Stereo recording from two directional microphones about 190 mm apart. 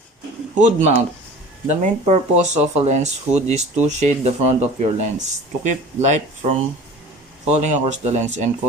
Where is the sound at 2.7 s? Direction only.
35° right (ahead or behind).